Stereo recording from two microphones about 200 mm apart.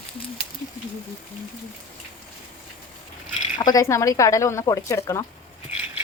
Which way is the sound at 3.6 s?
15° left (ahead or behind).